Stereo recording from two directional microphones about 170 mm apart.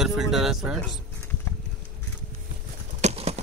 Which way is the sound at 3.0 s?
40° right (ahead or behind).